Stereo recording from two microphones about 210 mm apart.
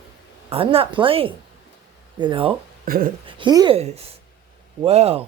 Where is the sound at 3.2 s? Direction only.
20° right (ahead or behind).